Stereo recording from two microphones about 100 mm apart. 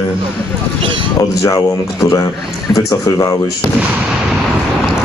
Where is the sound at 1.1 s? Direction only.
40° left (ahead or behind).